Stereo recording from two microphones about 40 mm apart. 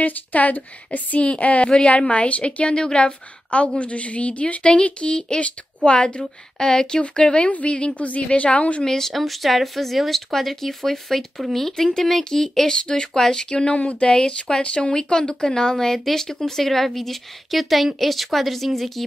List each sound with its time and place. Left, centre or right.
0.0 s a woman's voice: left
8.8 s speech: centre
9.1 s a woman's voice: centre